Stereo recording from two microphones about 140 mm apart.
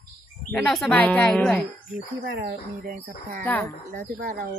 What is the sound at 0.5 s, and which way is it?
Speech, 5° left (ahead or behind).